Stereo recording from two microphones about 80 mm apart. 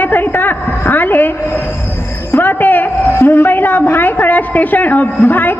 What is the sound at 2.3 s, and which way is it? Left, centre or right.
A woman's voice, left.